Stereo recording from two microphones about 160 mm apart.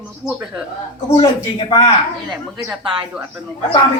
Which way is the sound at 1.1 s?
30° left (ahead or behind).